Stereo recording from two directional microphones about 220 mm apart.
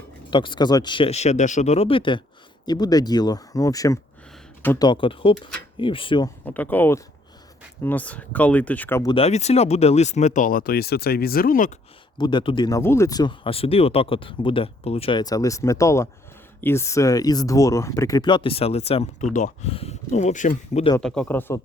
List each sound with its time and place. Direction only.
0.3 s speech: 20° left (ahead or behind)
4.9 s speech: 25° left (ahead or behind)
6.4 s speech: 10° left (ahead or behind)
9.1 s speech: 30° left (ahead or behind)
12.1 s speech: 20° left (ahead or behind)
21.0 s speech: 5° left (ahead or behind)